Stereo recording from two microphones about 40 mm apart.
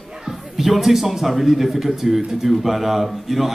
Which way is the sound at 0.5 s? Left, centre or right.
Centre.